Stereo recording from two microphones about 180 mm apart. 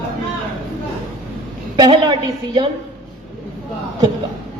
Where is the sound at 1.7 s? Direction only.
25° right (ahead or behind).